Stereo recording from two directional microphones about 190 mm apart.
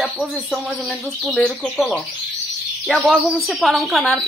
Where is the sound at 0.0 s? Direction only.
Centre (ahead or behind).